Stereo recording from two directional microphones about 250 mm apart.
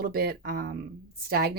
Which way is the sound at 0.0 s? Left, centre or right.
Right.